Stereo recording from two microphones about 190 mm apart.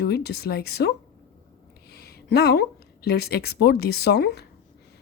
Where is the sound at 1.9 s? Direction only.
55° left (ahead or behind).